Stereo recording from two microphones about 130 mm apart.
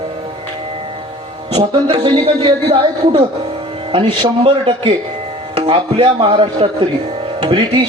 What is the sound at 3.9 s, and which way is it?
A man's voice, 40° right (ahead or behind).